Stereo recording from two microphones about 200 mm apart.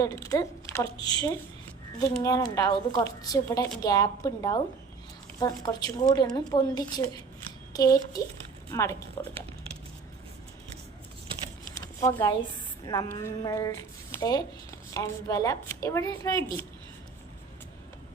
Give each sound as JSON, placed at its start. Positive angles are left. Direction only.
{"t": 0.0, "sound": "a woman's voice", "side_deg": 15}
{"t": 11.9, "sound": "a woman's voice", "side_deg": 15}